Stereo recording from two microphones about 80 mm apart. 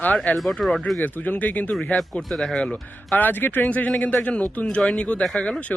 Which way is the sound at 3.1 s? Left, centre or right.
Left.